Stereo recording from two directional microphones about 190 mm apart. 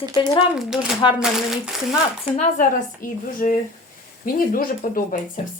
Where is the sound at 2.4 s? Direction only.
45° left (ahead or behind).